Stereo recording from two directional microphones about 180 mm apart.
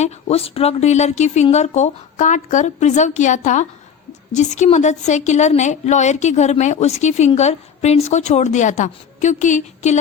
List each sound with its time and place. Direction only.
0.0 s a woman's voice: 35° left (ahead or behind)